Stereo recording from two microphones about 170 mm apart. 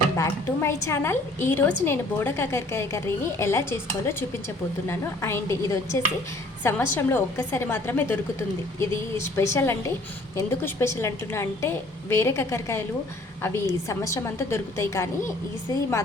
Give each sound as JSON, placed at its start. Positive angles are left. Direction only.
{"t": 0.2, "sound": "a woman's voice", "side_deg": 15}